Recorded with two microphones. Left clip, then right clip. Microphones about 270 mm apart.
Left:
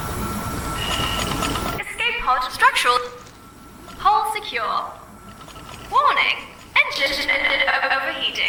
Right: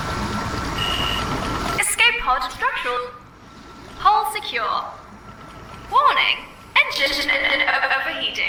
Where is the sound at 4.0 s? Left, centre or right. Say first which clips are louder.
Right 1 dB; centre.